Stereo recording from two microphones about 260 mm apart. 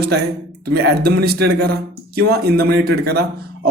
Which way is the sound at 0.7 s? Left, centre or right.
Right.